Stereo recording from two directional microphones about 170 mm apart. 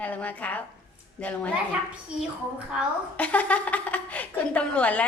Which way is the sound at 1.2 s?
10° left (ahead or behind).